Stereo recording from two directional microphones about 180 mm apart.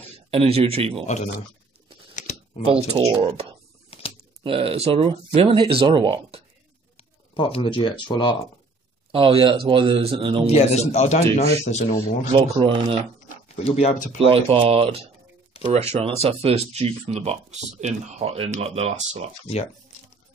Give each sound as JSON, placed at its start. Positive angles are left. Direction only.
{"t": 0.3, "sound": "speech", "side_deg": -30}
{"t": 2.1, "sound": "a sound", "side_deg": 45}
{"t": 2.9, "sound": "speech", "side_deg": -25}
{"t": 7.3, "sound": "speech", "side_deg": 30}
{"t": 9.1, "sound": "speech", "side_deg": -30}
{"t": 10.4, "sound": "a man's voice", "side_deg": 35}
{"t": 12.3, "sound": "speech", "side_deg": -25}
{"t": 13.3, "sound": "speech", "side_deg": 40}
{"t": 14.2, "sound": "speech", "side_deg": -30}
{"t": 15.5, "sound": "a sound", "side_deg": 35}
{"t": 15.9, "sound": "speech", "side_deg": -35}
{"t": 19.4, "sound": "speech", "side_deg": 35}